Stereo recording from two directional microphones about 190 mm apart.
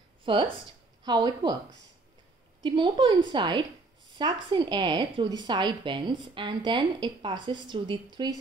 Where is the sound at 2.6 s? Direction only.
25° right (ahead or behind).